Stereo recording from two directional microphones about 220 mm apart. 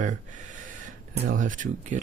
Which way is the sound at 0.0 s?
35° right (ahead or behind).